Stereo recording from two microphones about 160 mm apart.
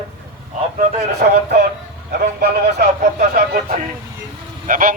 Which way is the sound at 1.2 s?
65° right (ahead or behind).